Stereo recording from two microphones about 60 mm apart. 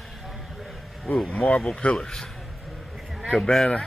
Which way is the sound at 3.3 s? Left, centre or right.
Centre.